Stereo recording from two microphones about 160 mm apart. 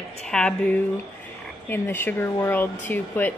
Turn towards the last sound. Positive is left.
turn(degrees=10)  # may be behind; listen again after turning